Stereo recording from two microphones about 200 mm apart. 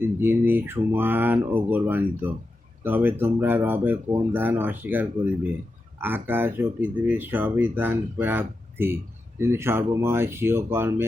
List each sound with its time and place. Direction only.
0.2 s speech: 10° right (ahead or behind)